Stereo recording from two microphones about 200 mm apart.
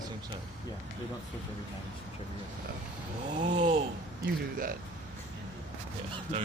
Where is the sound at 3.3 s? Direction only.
35° right (ahead or behind).